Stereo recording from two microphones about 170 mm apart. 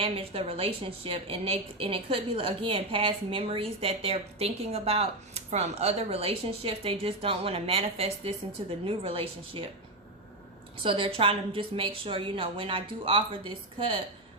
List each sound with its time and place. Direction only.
0.0 s a woman's voice: 35° right (ahead or behind)
10.8 s a woman's voice: 30° right (ahead or behind)